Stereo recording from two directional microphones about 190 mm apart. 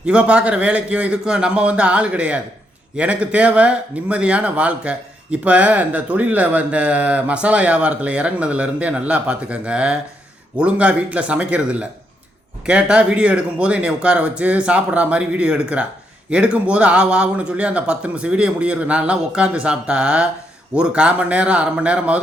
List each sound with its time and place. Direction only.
0.0 s speech: 5° right (ahead or behind)